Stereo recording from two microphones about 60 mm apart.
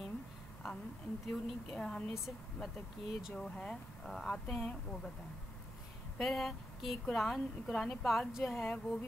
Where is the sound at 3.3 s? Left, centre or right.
Centre.